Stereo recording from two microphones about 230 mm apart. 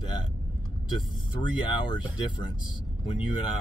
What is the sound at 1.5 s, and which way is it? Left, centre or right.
Speech, centre.